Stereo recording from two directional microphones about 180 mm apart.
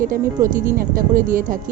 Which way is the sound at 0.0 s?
50° right (ahead or behind).